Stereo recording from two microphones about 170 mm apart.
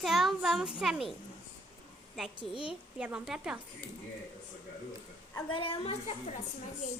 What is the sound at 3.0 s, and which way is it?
Speech, 5° right (ahead or behind).